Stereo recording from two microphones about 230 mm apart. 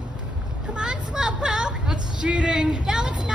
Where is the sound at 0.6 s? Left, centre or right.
Centre.